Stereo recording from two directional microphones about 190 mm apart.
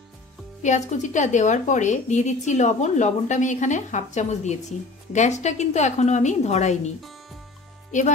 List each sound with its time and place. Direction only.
0.6 s a woman's voice: 40° left (ahead or behind)